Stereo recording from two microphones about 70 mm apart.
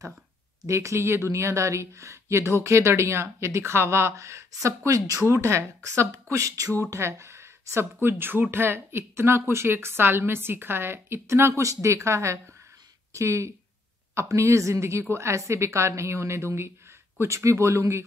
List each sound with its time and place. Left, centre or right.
0.7 s speech: right